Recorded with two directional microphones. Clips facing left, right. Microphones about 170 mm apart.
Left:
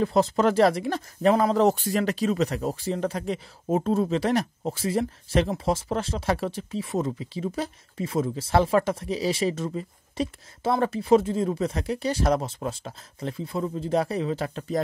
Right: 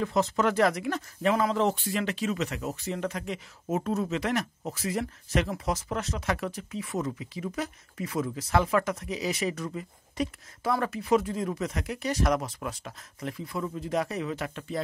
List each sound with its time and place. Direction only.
0.0 s speech: 35° left (ahead or behind)